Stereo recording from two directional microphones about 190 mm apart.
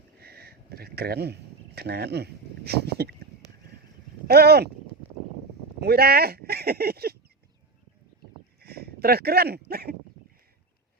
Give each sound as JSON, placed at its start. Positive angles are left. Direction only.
{"t": 0.2, "sound": "a sound", "side_deg": -55}
{"t": 4.3, "sound": "speech", "side_deg": -55}
{"t": 5.8, "sound": "speech", "side_deg": -55}
{"t": 8.6, "sound": "speech", "side_deg": -55}